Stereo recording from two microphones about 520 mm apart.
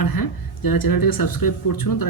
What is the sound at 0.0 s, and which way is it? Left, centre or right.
Speech, left.